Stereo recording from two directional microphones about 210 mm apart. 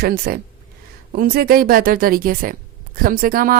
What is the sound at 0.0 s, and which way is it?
A woman's voice, 45° right (ahead or behind).